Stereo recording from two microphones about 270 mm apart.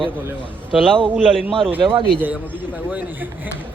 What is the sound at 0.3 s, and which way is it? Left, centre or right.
A man's voice, centre.